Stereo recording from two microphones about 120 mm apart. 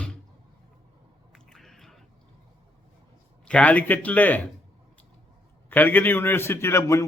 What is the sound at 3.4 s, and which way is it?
Speech, 10° left (ahead or behind).